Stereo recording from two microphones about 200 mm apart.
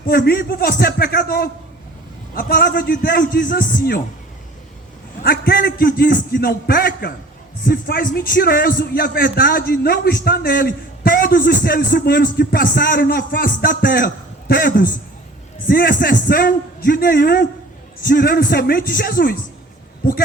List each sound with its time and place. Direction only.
0.0 s a man's voice: 50° left (ahead or behind)
5.2 s a man's voice: 50° left (ahead or behind)